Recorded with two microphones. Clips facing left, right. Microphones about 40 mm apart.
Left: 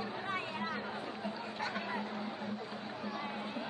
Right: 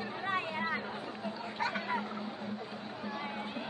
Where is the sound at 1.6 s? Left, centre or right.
Right.